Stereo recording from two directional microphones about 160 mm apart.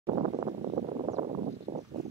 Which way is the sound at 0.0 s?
40° right (ahead or behind).